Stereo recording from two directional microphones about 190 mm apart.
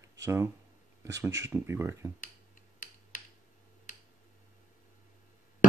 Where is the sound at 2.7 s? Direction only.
45° left (ahead or behind).